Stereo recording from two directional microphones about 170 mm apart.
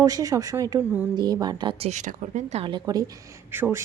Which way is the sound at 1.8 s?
45° right (ahead or behind).